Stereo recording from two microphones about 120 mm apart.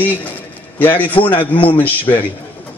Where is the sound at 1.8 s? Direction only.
15° left (ahead or behind).